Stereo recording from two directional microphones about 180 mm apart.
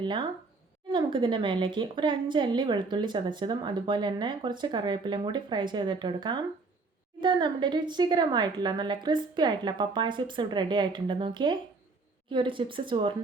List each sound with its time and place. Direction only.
0.0 s a woman's voice: 25° right (ahead or behind)